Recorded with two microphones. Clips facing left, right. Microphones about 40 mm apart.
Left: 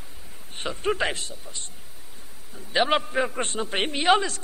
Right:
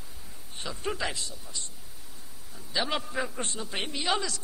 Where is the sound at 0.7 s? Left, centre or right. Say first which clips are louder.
Left 7 dB; left.